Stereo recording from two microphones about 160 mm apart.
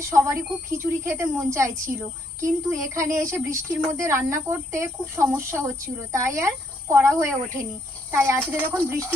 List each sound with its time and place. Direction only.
0.1 s speech: 15° right (ahead or behind)